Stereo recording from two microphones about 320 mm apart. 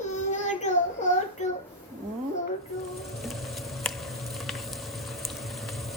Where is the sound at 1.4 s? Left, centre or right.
Left.